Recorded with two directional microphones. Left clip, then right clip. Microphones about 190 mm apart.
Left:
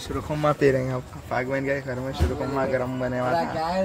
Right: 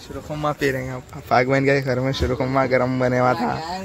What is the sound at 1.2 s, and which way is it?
Speech, 45° right (ahead or behind).